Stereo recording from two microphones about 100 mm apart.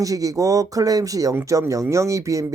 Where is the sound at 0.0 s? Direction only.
35° right (ahead or behind).